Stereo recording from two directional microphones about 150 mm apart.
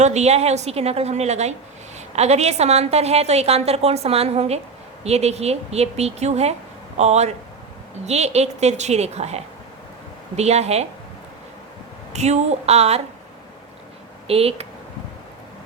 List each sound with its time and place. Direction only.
0.0 s a woman's voice: 50° right (ahead or behind)
12.1 s a woman's voice: 50° right (ahead or behind)
14.3 s speech: 40° right (ahead or behind)